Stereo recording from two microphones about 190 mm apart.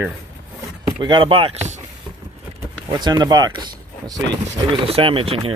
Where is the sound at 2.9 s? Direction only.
20° right (ahead or behind).